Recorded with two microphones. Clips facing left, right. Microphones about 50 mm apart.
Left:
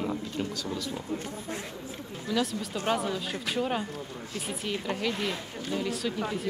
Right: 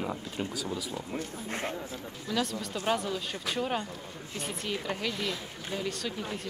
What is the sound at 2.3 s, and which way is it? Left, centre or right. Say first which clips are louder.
Speech: left 2 dB; centre.